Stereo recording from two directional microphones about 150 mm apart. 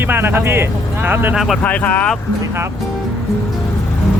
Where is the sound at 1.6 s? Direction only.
10° left (ahead or behind).